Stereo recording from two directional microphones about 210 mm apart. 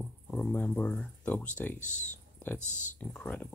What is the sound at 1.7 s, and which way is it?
Speech, 35° left (ahead or behind).